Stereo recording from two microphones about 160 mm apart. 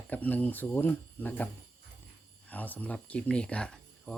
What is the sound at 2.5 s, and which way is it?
Speech, 10° left (ahead or behind).